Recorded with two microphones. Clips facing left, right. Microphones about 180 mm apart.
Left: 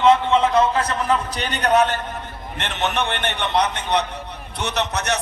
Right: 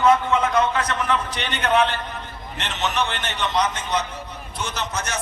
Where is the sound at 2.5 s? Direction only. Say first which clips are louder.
Left 1 dB; 55° left (ahead or behind).